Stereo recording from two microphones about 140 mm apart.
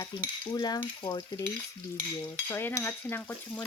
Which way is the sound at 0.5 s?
30° left (ahead or behind).